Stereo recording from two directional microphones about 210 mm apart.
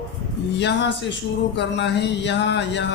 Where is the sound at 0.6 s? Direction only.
55° left (ahead or behind).